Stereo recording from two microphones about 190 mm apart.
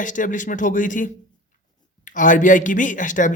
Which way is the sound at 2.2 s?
45° left (ahead or behind).